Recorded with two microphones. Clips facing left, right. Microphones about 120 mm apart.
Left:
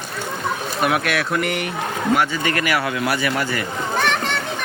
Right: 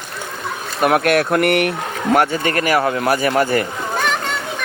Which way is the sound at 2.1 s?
50° right (ahead or behind).